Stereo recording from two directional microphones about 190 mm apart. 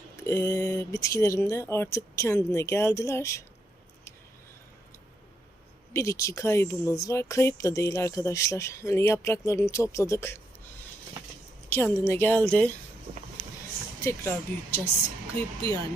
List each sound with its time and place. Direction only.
0.2 s speech: 15° left (ahead or behind)
5.9 s speech: 15° left (ahead or behind)
11.7 s speech: 15° left (ahead or behind)
14.0 s speech: 15° left (ahead or behind)